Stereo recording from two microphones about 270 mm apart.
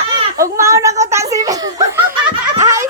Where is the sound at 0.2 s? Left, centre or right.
Centre.